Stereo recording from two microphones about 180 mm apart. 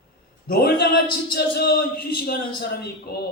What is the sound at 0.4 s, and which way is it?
A man's voice, 60° left (ahead or behind).